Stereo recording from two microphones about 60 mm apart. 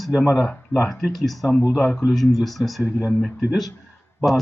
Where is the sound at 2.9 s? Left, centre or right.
Centre.